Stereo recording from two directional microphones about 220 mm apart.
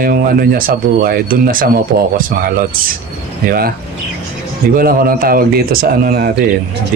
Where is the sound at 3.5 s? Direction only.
45° right (ahead or behind).